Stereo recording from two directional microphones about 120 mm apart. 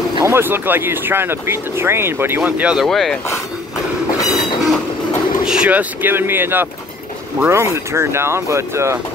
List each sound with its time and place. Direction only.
0.2 s speech: 20° right (ahead or behind); by 3.2 s centre (ahead or behind)
5.4 s speech: 5° right (ahead or behind); by 8.9 s 25° right (ahead or behind)